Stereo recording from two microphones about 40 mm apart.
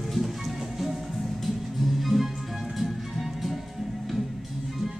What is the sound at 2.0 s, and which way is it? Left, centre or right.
Music, centre.